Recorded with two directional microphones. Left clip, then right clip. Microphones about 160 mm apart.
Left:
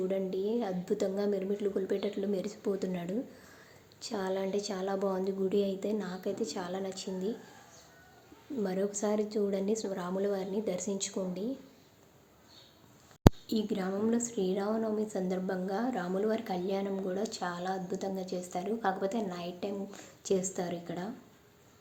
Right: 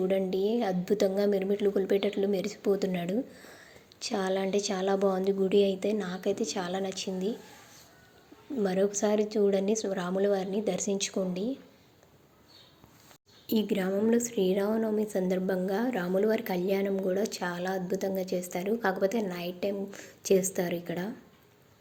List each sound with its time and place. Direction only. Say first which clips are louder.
0.0 s a woman's voice: right 5 dB; 20° right (ahead or behind)
8.6 s a woman's voice: right 6 dB; 15° right (ahead or behind)
13.5 s a woman's voice: right 5 dB; 15° right (ahead or behind)